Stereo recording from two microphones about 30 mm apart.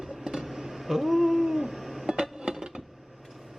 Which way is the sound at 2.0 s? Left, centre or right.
Right.